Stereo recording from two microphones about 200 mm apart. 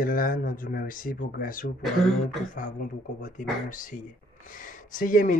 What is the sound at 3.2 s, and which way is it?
Speech, 40° left (ahead or behind).